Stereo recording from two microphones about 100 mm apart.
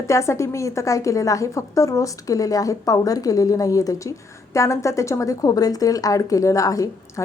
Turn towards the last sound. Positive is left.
turn(degrees=35)  # may be behind; listen again after turning